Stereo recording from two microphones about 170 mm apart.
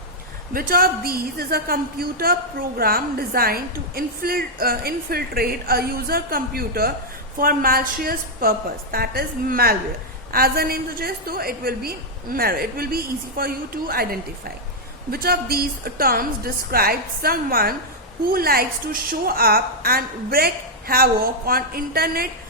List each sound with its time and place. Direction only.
0.5 s a woman's voice: 60° right (ahead or behind)